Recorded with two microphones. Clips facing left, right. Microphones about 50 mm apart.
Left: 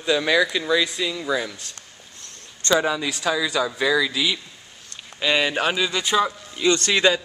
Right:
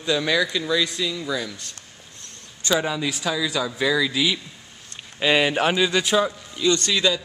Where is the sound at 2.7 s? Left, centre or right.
Centre.